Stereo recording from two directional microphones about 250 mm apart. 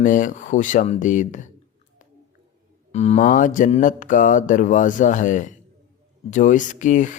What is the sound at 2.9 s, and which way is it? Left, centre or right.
Speech, left.